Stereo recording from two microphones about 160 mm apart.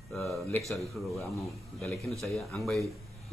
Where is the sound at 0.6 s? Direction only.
Centre (ahead or behind).